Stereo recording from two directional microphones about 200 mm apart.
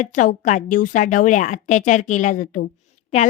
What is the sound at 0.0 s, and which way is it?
A woman's voice, 40° left (ahead or behind).